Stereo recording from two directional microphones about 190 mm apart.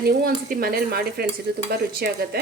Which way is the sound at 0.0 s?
55° right (ahead or behind).